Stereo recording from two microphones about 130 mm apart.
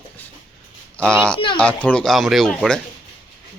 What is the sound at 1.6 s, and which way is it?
Speech, 10° left (ahead or behind).